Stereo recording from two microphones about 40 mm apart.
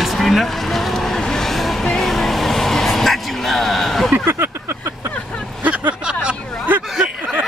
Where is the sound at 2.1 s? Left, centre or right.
Centre.